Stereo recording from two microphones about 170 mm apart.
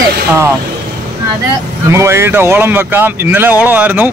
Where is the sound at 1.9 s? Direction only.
15° right (ahead or behind).